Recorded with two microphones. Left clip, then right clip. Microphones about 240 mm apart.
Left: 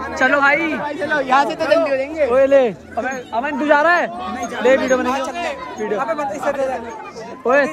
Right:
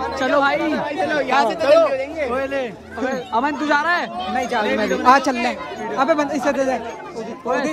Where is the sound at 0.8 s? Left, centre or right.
Centre; by 2.2 s left.